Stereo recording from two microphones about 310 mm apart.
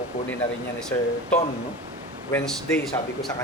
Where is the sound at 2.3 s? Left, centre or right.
Centre.